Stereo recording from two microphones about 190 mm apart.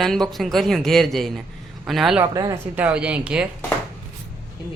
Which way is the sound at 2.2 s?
20° right (ahead or behind).